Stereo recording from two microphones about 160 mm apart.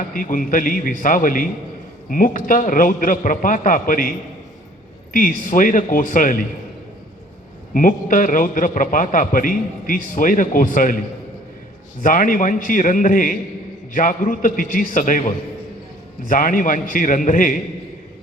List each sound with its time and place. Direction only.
0.1 s a man's voice: 60° left (ahead or behind)
5.5 s a man's voice: 55° left (ahead or behind)
7.7 s a man's voice: 60° left (ahead or behind)
12.0 s a man's voice: 55° left (ahead or behind)
16.2 s a man's voice: 55° left (ahead or behind)